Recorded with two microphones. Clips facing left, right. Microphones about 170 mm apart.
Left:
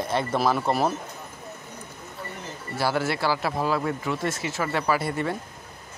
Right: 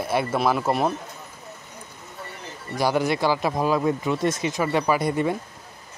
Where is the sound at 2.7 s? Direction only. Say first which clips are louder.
Right 3 dB; 15° right (ahead or behind).